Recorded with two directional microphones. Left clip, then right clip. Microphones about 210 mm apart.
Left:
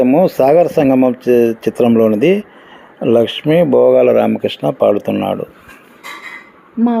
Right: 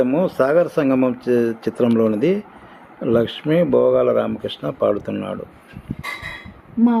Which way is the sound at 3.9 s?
35° left (ahead or behind).